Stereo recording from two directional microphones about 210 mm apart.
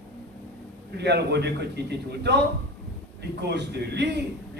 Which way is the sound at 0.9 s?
55° right (ahead or behind).